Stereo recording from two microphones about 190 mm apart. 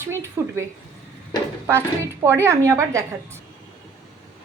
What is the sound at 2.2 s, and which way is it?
Speech, 15° right (ahead or behind).